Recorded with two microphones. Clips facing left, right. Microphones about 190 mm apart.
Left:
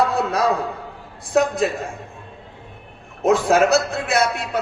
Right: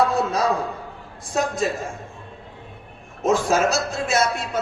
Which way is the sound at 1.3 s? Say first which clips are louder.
Left 6 dB; 60° left (ahead or behind).